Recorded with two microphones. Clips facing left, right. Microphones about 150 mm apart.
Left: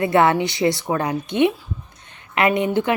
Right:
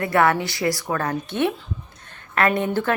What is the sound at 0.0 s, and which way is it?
Speech, 20° left (ahead or behind).